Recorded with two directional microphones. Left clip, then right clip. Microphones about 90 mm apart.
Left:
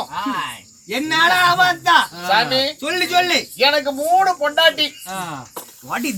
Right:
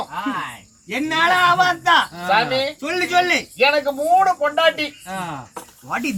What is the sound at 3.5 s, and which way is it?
Speech, 10° right (ahead or behind).